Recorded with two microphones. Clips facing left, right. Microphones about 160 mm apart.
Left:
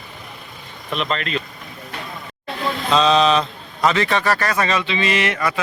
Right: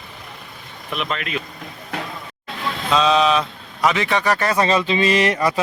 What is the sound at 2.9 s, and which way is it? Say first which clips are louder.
A man's voice: left 1 dB; 5° right (ahead or behind).